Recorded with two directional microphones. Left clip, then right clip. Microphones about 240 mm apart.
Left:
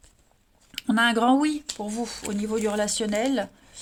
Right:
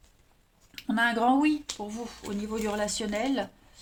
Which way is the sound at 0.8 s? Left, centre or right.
Left.